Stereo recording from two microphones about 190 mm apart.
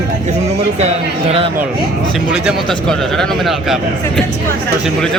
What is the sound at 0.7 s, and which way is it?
Speech, 35° right (ahead or behind).